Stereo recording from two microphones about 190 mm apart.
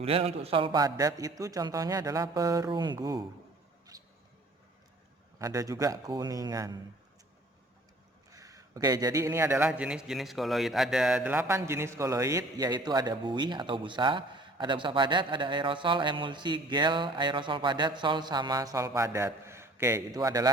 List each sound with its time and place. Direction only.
0.0 s a man's voice: 30° right (ahead or behind)
3.9 s a sound: 20° right (ahead or behind)
5.4 s a man's voice: 20° right (ahead or behind)
8.3 s a man's voice: 15° right (ahead or behind)